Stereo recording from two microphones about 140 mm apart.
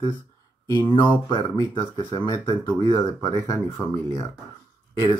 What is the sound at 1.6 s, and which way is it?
Speech, 25° left (ahead or behind).